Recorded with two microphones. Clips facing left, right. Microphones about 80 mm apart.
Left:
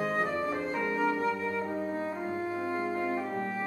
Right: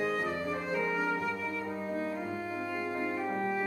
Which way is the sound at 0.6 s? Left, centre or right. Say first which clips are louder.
Even; left.